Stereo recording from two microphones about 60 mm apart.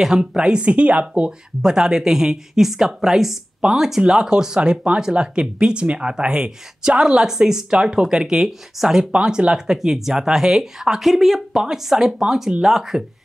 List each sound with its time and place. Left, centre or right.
0.0 s speech: centre